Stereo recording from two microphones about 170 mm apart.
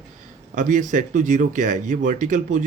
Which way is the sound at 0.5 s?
50° right (ahead or behind).